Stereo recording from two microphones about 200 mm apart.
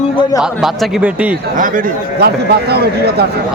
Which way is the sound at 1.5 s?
40° right (ahead or behind).